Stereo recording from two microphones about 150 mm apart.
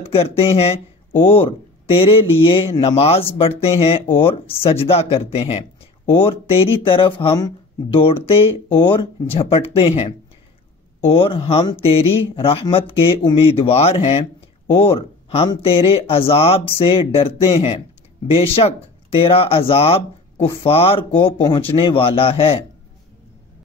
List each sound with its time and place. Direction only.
0.0 s speech: 40° left (ahead or behind)